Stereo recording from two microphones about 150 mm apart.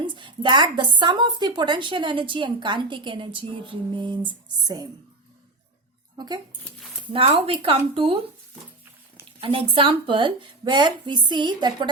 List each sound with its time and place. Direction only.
0.0 s a woman's voice: 30° right (ahead or behind)
6.1 s a woman's voice: 30° right (ahead or behind)
9.4 s a woman's voice: 35° right (ahead or behind)